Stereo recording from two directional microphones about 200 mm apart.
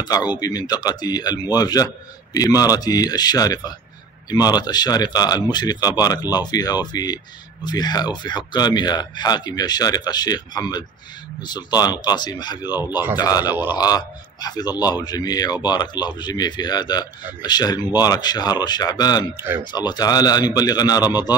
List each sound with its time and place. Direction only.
0.3 s a man's voice: 20° left (ahead or behind)